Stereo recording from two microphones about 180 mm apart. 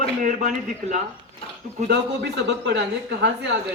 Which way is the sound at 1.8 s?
70° right (ahead or behind).